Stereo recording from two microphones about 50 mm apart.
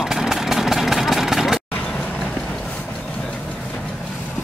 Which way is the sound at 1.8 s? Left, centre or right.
Left.